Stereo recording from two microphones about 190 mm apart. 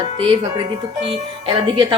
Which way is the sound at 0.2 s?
30° right (ahead or behind).